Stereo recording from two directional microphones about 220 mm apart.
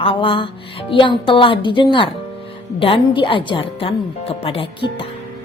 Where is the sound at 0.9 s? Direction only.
20° left (ahead or behind).